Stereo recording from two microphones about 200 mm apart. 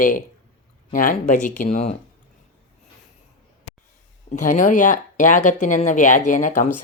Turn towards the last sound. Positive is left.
turn(degrees=40)  # may be behind; listen again after turning